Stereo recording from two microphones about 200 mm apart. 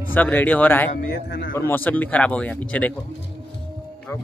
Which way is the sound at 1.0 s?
50° left (ahead or behind).